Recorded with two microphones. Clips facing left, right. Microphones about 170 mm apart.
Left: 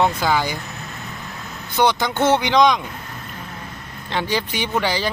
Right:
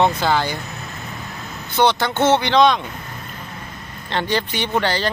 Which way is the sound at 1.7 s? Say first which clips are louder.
Right 1 dB; 10° left (ahead or behind).